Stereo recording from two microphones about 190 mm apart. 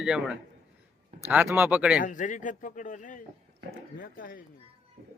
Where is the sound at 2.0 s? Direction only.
45° left (ahead or behind).